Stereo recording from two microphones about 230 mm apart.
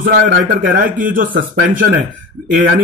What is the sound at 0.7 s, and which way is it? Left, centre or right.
Speech, right.